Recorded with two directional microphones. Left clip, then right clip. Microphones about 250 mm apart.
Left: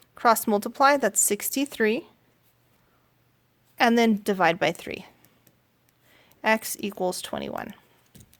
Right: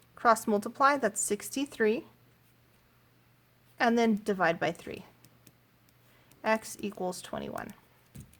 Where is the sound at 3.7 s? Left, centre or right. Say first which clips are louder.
Left 6 dB; left.